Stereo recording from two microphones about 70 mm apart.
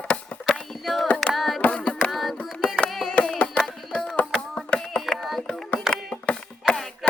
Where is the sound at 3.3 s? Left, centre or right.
Centre.